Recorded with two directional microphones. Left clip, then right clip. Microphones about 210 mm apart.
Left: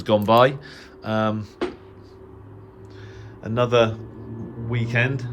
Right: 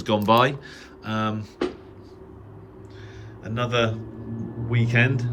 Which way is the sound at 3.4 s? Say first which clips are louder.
Left 5 dB; 20° left (ahead or behind).